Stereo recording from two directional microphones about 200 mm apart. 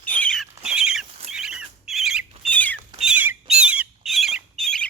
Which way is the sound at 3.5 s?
5° right (ahead or behind).